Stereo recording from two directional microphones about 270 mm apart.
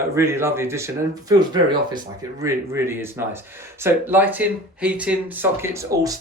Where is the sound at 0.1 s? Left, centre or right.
Centre.